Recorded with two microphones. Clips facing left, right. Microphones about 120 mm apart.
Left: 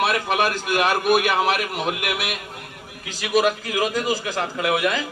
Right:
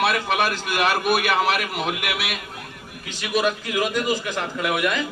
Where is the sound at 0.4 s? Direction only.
40° left (ahead or behind).